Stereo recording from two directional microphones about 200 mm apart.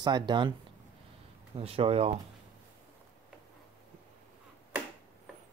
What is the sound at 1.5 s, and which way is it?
Speech, 30° right (ahead or behind).